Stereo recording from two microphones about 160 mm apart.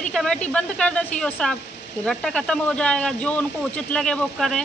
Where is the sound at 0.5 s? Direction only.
5° left (ahead or behind).